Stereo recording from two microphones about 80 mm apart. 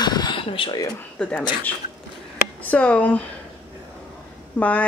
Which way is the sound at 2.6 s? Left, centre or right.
Centre.